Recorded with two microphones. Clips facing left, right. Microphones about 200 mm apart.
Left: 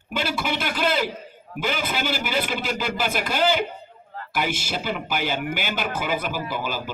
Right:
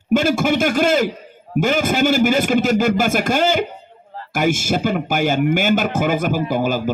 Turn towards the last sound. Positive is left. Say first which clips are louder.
# right 10 dB
turn(degrees=-45)  # may be behind; listen again after turning